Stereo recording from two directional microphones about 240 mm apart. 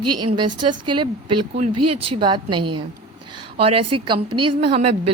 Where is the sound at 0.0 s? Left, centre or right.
Right.